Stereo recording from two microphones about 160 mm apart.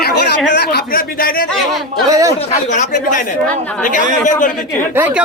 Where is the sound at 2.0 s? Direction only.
20° right (ahead or behind).